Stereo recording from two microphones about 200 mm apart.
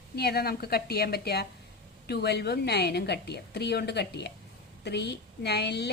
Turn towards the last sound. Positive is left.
turn(degrees=55)  # may be behind; listen again after turning